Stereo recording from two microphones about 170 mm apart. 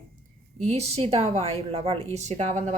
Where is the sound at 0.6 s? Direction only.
35° right (ahead or behind).